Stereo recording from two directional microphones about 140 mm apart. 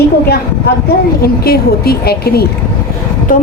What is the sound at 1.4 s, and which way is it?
Speech, 90° left.